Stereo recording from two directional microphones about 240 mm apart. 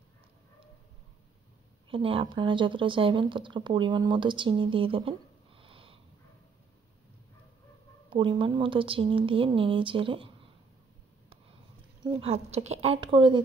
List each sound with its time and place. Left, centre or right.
1.9 s speech: right
8.1 s speech: right
12.0 s speech: right